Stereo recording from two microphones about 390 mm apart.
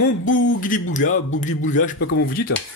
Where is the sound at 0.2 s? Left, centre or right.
Centre.